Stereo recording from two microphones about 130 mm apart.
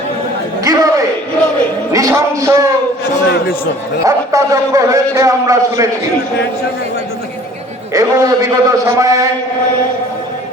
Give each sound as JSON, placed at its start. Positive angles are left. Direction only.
{"t": 0.6, "sound": "a sound", "side_deg": -25}
{"t": 1.9, "sound": "speech", "side_deg": -25}
{"t": 4.0, "sound": "a man's voice", "side_deg": -25}
{"t": 7.9, "sound": "a man's voice", "side_deg": -25}